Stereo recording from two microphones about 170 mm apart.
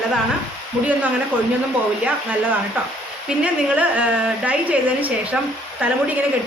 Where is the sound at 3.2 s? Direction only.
10° right (ahead or behind).